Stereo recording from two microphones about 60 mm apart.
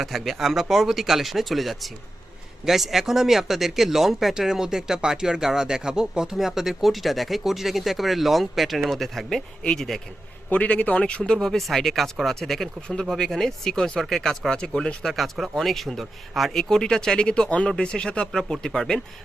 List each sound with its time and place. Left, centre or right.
0.0 s speech: centre
10.5 s a man's voice: left
11.2 s speech: centre
15.0 s speech: centre